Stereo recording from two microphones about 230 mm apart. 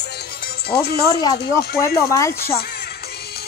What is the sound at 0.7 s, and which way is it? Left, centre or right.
Speech, left.